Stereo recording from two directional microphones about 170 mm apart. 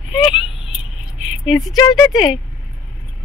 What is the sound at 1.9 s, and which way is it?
Speech, 25° left (ahead or behind).